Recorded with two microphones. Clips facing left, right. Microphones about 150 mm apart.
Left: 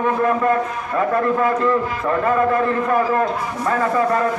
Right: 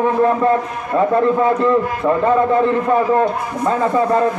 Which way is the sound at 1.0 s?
20° right (ahead or behind).